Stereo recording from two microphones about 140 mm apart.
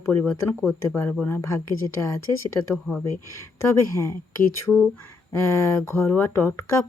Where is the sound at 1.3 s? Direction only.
20° left (ahead or behind).